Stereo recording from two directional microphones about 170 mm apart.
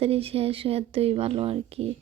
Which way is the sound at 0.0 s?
35° right (ahead or behind).